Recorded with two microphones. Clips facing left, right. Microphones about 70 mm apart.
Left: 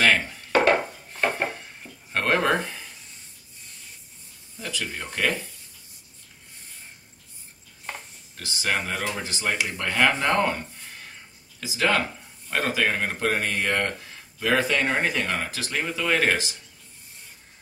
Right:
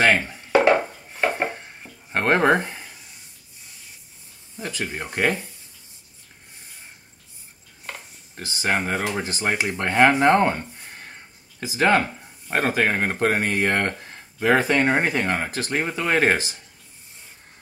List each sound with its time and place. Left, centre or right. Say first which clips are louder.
0.0 s chopping: right 2 dB; right
0.7 s a sound: right 3 dB; centre
2.1 s speech: right 4 dB; right
4.6 s speech: right 3 dB; right
8.4 s speech: right 3 dB; right